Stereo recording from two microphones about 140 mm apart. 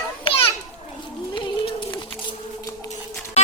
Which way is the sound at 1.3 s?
35° left (ahead or behind).